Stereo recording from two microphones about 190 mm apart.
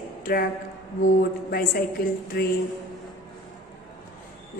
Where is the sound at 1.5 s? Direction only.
50° left (ahead or behind).